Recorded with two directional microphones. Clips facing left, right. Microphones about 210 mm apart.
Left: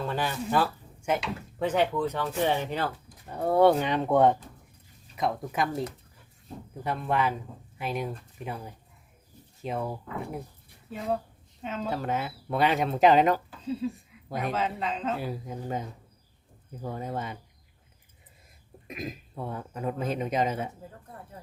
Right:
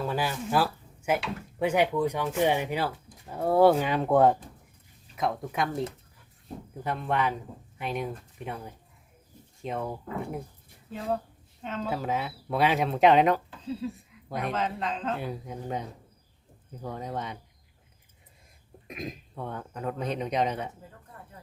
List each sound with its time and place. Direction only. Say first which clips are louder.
0.0 s speech: right 1 dB; 5° right (ahead or behind)
6.8 s speech: left 1 dB; centre (ahead or behind)
11.6 s speech: even; 5° left (ahead or behind)
18.9 s speech: left 1 dB; 5° left (ahead or behind)